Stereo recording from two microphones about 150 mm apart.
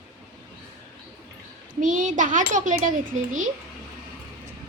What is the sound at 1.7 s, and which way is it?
Child singing, 60° right (ahead or behind).